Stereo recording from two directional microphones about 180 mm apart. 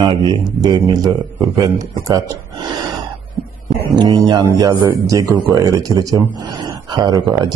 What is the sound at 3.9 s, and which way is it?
Speech, 20° right (ahead or behind).